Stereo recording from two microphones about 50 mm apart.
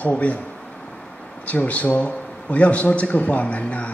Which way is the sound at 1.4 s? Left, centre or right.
Left.